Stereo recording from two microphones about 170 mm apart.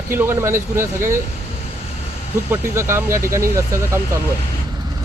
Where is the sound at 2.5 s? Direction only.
15° right (ahead or behind).